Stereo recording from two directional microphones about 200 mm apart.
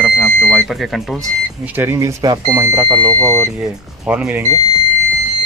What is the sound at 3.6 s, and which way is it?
Speech, 5° right (ahead or behind).